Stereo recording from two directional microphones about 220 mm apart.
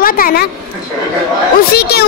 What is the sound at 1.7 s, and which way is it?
Speech, 45° left (ahead or behind).